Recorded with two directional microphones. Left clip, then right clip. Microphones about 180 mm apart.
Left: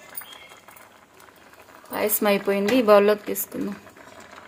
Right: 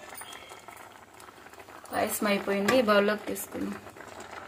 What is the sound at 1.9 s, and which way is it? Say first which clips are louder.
Speech: left 6 dB; 70° left (ahead or behind).